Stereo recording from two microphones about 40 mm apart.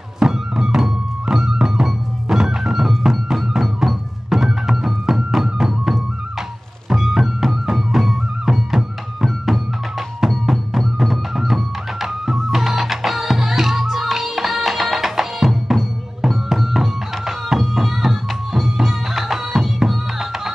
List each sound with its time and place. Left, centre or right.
0.2 s music: centre